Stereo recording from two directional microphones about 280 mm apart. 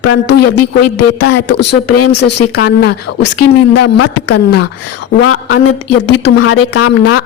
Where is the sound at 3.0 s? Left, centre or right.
Left.